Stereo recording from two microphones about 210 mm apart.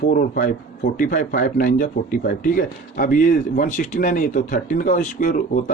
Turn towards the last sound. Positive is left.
turn(degrees=40)  # may be behind; listen again after turning